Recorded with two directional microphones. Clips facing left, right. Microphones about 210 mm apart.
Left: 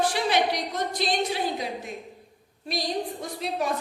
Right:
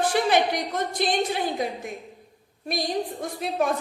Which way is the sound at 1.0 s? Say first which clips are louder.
Right 3 dB; 50° right (ahead or behind).